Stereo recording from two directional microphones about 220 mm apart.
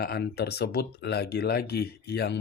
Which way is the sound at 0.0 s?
45° left (ahead or behind).